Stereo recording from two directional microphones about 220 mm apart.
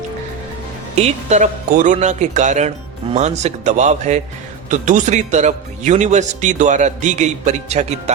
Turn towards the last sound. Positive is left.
turn(degrees=-30)  # may be behind; listen again after turning